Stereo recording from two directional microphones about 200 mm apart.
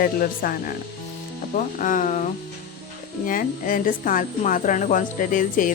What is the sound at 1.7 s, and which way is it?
Speech, 40° left (ahead or behind).